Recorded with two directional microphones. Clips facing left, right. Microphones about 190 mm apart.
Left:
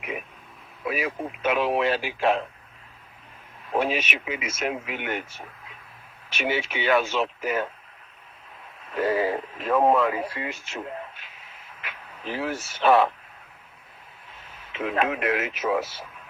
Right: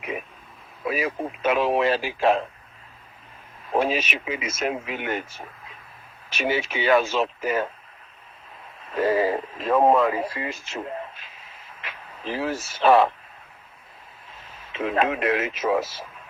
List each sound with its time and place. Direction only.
0.9 s speech: 35° right (ahead or behind)
3.7 s speech: 35° right (ahead or behind)
6.3 s speech: 40° right (ahead or behind)
9.0 s speech: 40° right (ahead or behind)
14.7 s speech: 30° right (ahead or behind)